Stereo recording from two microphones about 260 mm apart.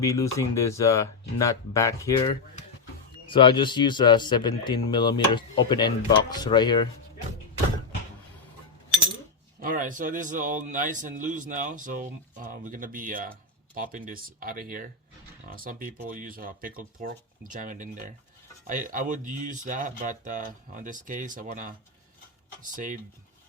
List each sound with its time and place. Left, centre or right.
0.0 s a man's voice: centre
9.6 s speech: right